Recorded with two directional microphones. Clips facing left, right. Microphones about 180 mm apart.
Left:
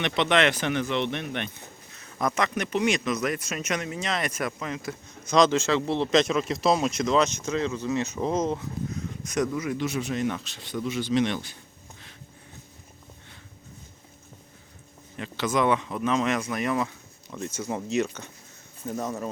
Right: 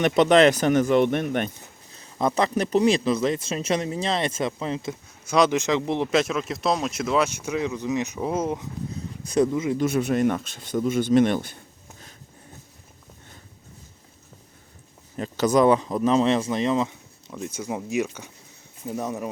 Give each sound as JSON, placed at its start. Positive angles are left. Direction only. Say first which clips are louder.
{"t": 0.0, "sound": "speech", "louder": "right 7 dB", "side_deg": -40}
{"t": 1.9, "sound": "speech", "louder": "right 4 dB", "side_deg": -30}
{"t": 5.2, "sound": "speech", "louder": "even", "side_deg": -10}
{"t": 9.2, "sound": "speech", "louder": "right 6 dB", "side_deg": -30}
{"t": 9.7, "sound": "speech", "louder": "right 6 dB", "side_deg": -50}
{"t": 15.1, "sound": "speech", "louder": "right 6 dB", "side_deg": -40}
{"t": 17.3, "sound": "speech", "louder": "right 1 dB", "side_deg": -10}